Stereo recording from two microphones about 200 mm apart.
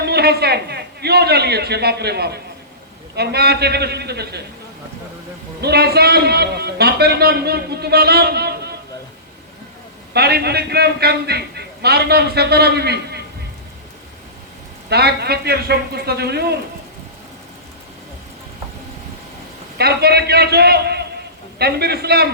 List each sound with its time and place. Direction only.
0.0 s a man's voice: 55° right (ahead or behind)
5.6 s a man's voice: 55° right (ahead or behind)
10.1 s a man's voice: 55° right (ahead or behind)
14.8 s a man's voice: 55° right (ahead or behind)
19.8 s a man's voice: 55° right (ahead or behind)